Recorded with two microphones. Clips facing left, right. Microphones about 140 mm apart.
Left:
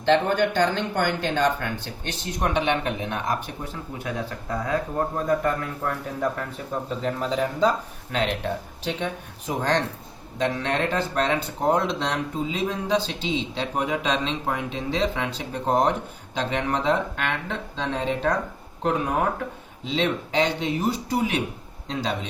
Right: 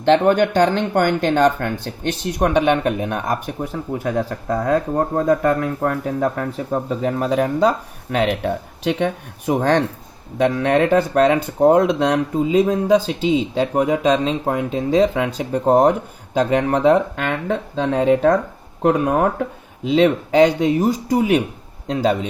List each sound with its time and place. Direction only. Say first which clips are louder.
0.1 s speech: right 6 dB; 60° right (ahead or behind); by 4.4 s 40° right (ahead or behind)
4.4 s speech: right 7 dB; 55° right (ahead or behind)
7.0 s speech: right 5 dB; 65° right (ahead or behind); by 21.4 s 45° right (ahead or behind)